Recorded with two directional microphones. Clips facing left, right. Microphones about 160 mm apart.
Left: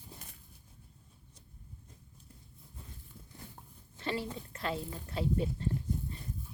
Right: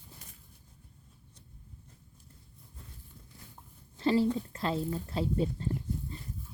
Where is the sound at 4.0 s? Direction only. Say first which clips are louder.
Right 10 dB; 35° right (ahead or behind).